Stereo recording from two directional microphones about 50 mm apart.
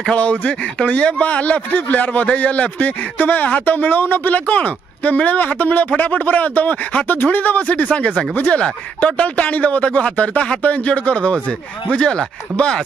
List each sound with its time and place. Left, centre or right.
0.1 s a man's voice: left